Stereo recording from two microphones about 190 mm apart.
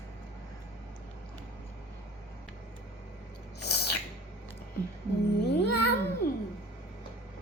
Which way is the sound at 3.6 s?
60° left (ahead or behind).